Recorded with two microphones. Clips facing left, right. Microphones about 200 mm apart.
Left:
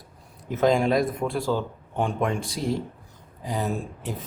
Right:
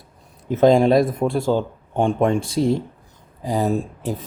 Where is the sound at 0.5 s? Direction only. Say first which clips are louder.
Right 7 dB; 30° right (ahead or behind).